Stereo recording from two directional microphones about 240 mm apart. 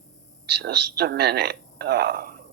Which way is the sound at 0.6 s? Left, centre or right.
Right.